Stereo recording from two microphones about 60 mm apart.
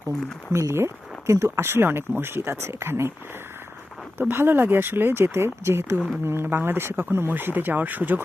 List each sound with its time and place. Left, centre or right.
0.5 s speech: right
4.2 s speech: right